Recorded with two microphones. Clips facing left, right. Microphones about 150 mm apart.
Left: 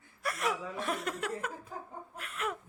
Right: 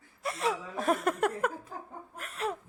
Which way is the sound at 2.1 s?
40° right (ahead or behind).